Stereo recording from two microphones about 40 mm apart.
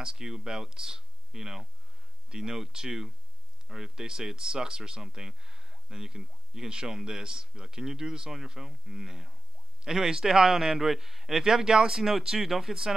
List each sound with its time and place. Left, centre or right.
0.0 s speech: centre